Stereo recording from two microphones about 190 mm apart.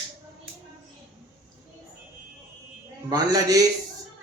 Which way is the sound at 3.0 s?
20° right (ahead or behind).